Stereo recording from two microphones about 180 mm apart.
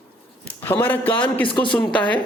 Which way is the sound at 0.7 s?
10° left (ahead or behind).